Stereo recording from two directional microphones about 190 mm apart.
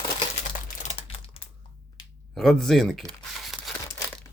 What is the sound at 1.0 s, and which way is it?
Typing, 30° left (ahead or behind).